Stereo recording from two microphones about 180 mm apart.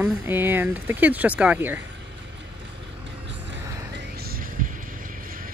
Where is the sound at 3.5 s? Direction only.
75° right (ahead or behind); by 4.7 s 50° right (ahead or behind).